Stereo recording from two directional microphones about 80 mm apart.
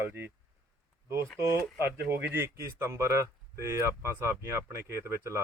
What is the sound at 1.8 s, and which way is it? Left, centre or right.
Speech, right.